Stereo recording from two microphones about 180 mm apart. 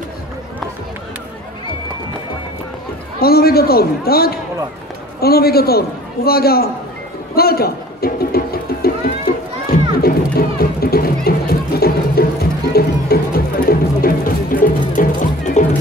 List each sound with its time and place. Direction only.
3.2 s a man's voice: 60° left (ahead or behind)
7.3 s music: 60° left (ahead or behind)
9.3 s run: 60° left (ahead or behind)
9.7 s music: 55° left (ahead or behind)